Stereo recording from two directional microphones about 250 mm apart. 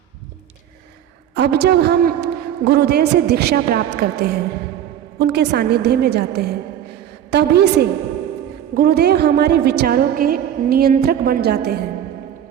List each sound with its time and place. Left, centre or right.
1.3 s a woman's voice: right